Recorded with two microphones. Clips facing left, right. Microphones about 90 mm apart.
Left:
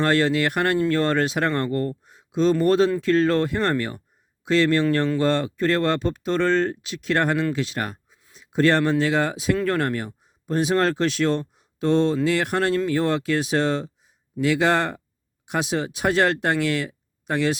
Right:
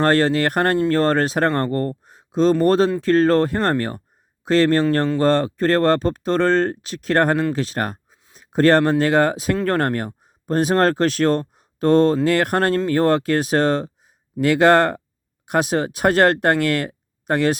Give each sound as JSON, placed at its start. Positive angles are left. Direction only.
{"t": 0.0, "sound": "speech", "side_deg": -40}